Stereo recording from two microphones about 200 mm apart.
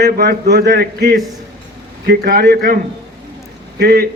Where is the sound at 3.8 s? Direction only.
50° right (ahead or behind).